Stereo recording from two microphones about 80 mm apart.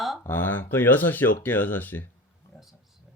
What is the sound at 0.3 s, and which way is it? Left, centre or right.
Speech, left.